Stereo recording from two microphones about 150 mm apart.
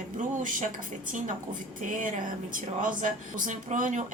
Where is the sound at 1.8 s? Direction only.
60° right (ahead or behind).